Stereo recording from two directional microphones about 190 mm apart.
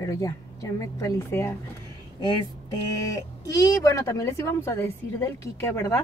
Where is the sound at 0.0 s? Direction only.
15° left (ahead or behind).